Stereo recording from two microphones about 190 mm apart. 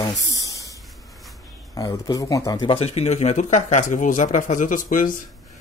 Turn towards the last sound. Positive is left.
turn(degrees=45)  # may be behind; listen again after turning